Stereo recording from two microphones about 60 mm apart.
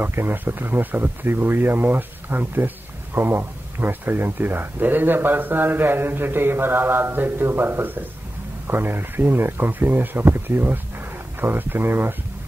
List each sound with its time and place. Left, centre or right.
0.0 s speech: right